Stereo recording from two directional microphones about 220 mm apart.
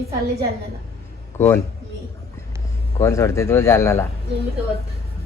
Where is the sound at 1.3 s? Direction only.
10° left (ahead or behind).